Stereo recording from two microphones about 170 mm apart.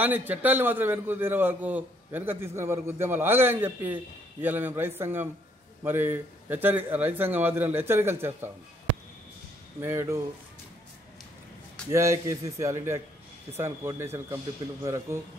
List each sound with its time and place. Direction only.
0.0 s a man's voice: 10° right (ahead or behind)
9.8 s a man's voice: 15° right (ahead or behind)
11.9 s a man's voice: 15° right (ahead or behind)